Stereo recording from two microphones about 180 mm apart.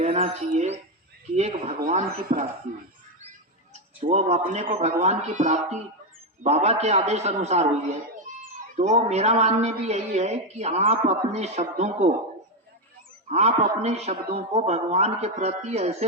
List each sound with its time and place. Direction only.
0.0 s a woman's voice: 35° right (ahead or behind)
4.0 s a woman's voice: 40° right (ahead or behind)
8.7 s a woman's voice: 40° right (ahead or behind)
13.2 s a woman's voice: 35° right (ahead or behind)